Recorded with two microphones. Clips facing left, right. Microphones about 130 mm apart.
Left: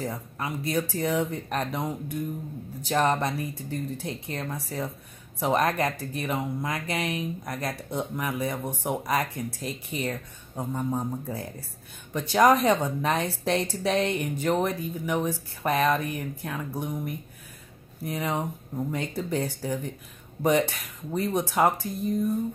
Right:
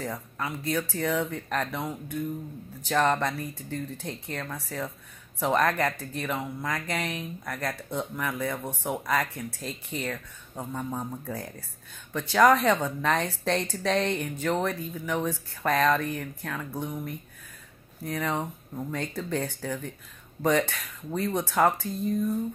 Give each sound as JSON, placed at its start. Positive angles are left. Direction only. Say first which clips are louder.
{"t": 0.1, "sound": "speech", "louder": "left 1 dB", "side_deg": 20}